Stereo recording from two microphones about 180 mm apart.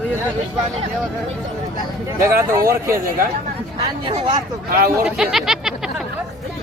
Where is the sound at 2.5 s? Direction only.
15° right (ahead or behind).